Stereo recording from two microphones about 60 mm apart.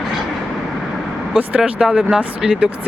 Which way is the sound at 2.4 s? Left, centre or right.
Centre.